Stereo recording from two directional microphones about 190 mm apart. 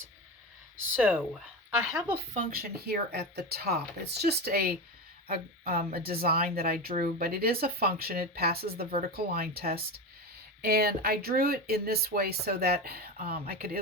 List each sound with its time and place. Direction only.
0.9 s speech: 10° right (ahead or behind)
2.3 s a woman's voice: 50° right (ahead or behind)